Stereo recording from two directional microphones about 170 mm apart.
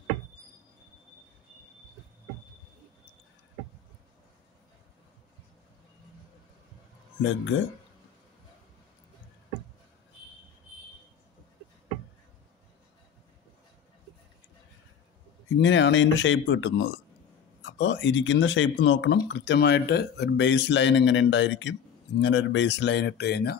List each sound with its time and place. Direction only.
7.2 s speech: 90° left
15.6 s speech: 90° left; by 23.6 s 70° left (ahead or behind)